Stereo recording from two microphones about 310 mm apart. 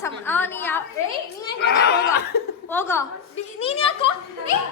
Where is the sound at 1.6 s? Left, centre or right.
Left.